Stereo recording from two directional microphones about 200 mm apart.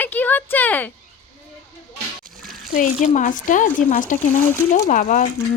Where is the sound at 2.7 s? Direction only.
40° left (ahead or behind).